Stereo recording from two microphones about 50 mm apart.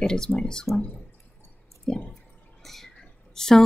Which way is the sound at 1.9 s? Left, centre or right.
Centre.